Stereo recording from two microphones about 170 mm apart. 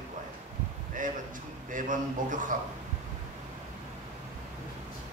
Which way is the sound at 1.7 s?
50° right (ahead or behind).